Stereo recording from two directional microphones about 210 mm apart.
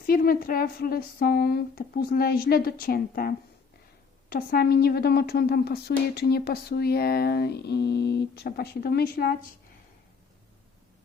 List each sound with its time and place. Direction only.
0.1 s a woman's voice: 45° left (ahead or behind)